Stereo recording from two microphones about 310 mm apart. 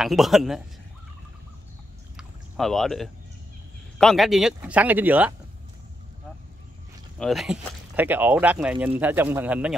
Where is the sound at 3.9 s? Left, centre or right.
Centre.